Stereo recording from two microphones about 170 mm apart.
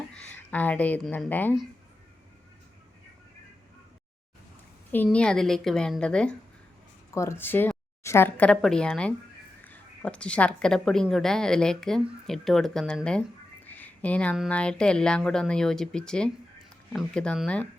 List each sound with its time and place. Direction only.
0.1 s speech: 5° left (ahead or behind)
5.0 s a woman's voice: 5° left (ahead or behind)
7.1 s a woman's voice: 15° left (ahead or behind)
13.7 s a sound: 10° left (ahead or behind)
14.3 s a woman's voice: 5° left (ahead or behind)